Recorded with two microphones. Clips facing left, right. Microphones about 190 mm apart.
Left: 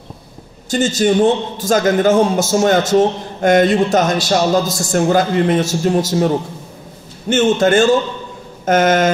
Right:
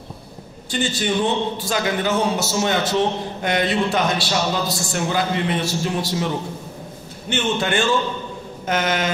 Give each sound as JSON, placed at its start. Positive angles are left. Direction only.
{"t": 0.7, "sound": "a man's voice", "side_deg": 45}